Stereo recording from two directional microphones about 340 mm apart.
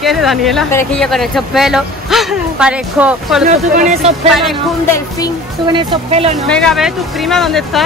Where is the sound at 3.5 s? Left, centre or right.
Centre.